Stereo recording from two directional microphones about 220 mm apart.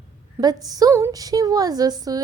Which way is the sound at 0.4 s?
10° right (ahead or behind).